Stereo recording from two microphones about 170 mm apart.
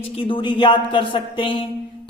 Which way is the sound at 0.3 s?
30° left (ahead or behind).